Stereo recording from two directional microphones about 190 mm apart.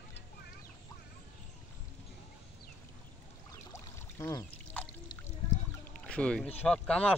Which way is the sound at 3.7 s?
15° left (ahead or behind).